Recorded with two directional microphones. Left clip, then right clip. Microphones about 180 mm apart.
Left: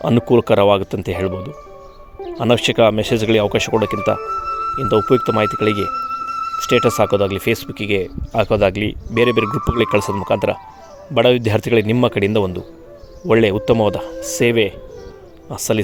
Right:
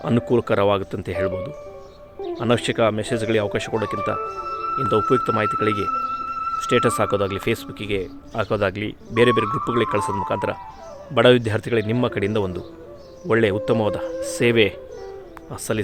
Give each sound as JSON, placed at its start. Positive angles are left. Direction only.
{"t": 0.0, "sound": "speech", "side_deg": 25}
{"t": 2.4, "sound": "speech", "side_deg": 30}
{"t": 4.8, "sound": "speech", "side_deg": 25}